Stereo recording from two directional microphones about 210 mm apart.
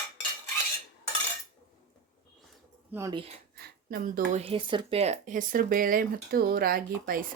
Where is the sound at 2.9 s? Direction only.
15° right (ahead or behind).